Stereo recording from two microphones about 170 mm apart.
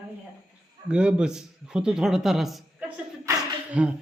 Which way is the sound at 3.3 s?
20° right (ahead or behind).